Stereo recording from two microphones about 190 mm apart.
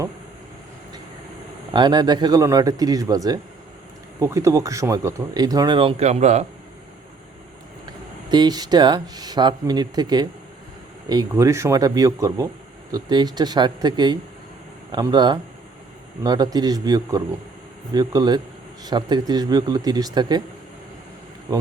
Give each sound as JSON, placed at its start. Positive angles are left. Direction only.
{"t": 1.7, "sound": "speech", "side_deg": -25}
{"t": 8.3, "sound": "speech", "side_deg": -20}